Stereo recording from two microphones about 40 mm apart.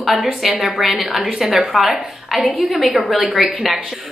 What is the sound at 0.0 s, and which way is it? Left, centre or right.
A woman's voice, centre.